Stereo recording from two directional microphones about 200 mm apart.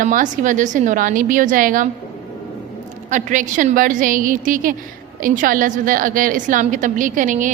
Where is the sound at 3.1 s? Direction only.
40° right (ahead or behind).